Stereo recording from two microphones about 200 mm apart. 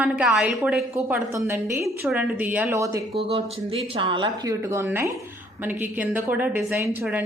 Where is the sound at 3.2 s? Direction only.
30° right (ahead or behind).